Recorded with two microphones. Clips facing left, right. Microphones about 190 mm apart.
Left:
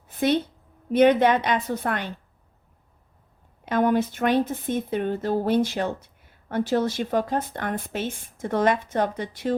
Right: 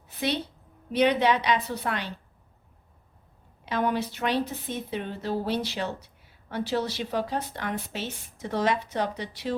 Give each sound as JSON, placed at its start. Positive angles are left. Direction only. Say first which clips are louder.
{"t": 0.9, "sound": "speech", "louder": "left 5 dB", "side_deg": 50}
{"t": 3.7, "sound": "speech", "louder": "left 6 dB", "side_deg": 50}